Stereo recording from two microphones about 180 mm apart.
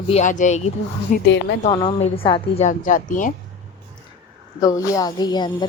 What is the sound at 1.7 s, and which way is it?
Speech, 25° left (ahead or behind).